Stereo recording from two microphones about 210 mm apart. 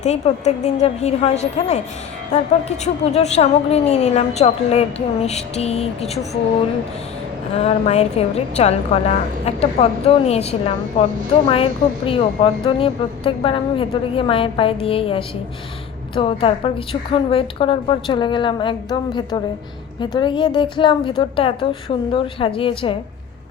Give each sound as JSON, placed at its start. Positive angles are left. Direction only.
{"t": 0.0, "sound": "a woman's voice", "side_deg": 35}
{"t": 7.5, "sound": "a woman's voice", "side_deg": 30}